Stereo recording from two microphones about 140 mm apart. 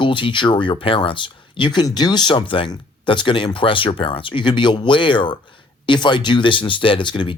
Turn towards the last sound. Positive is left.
turn(degrees=35)  # may be behind; listen again after turning